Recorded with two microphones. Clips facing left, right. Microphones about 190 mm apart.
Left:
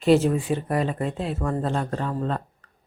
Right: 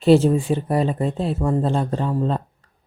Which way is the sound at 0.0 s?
30° right (ahead or behind).